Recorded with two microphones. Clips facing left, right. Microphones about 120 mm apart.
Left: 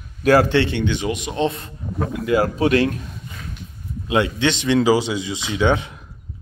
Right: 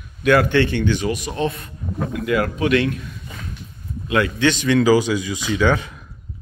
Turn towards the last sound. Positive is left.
turn(degrees=25)  # may be behind; listen again after turning